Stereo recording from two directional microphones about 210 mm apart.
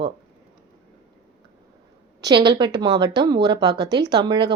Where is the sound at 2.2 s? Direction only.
20° right (ahead or behind).